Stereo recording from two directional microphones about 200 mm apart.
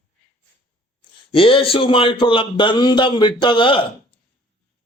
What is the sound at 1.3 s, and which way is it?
A man's voice, 25° left (ahead or behind).